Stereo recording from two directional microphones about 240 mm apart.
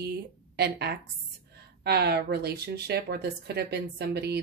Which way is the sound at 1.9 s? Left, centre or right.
Right.